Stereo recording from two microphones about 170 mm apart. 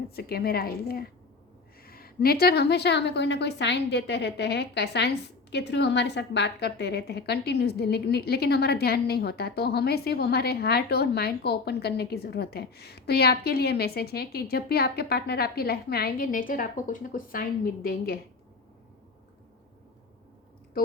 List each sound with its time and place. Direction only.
0.2 s a woman's voice: 65° left (ahead or behind)